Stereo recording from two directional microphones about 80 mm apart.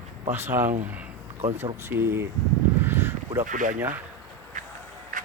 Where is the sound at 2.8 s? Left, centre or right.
Right.